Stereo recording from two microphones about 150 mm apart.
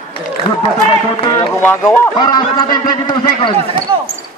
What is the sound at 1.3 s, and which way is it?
A man's voice, 20° left (ahead or behind).